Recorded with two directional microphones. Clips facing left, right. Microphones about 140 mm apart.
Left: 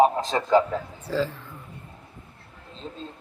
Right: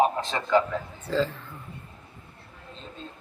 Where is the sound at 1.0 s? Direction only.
10° left (ahead or behind).